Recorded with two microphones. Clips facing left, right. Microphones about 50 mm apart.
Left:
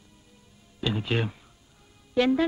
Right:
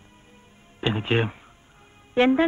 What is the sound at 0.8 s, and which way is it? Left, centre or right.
Speech, right.